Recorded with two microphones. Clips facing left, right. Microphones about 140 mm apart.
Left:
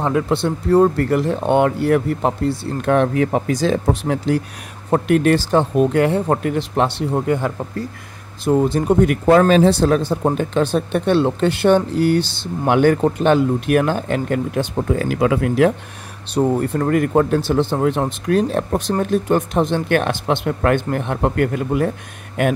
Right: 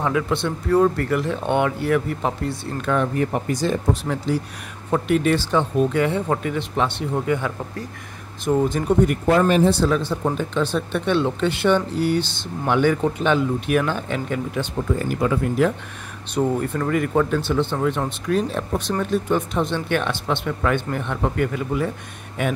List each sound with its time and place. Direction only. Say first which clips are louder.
0.1 s speech: left 4 dB; 35° left (ahead or behind)
3.0 s speech: left 5 dB; 90° left
3.8 s speech: left 4 dB; 60° left (ahead or behind)
5.4 s speech: left 4 dB; 40° left (ahead or behind)
9.0 s speech: left 5 dB; 90° left
9.8 s speech: left 4 dB; 50° left (ahead or behind)
11.1 s speech: left 4 dB; 40° left (ahead or behind)
13.0 s speech: left 5 dB; 40° left (ahead or behind); by 14.7 s 55° left (ahead or behind)
14.9 s speech: left 4 dB; 90° left
16.5 s speech: left 4 dB; 35° left (ahead or behind)
20.2 s speech: left 5 dB; 60° left (ahead or behind)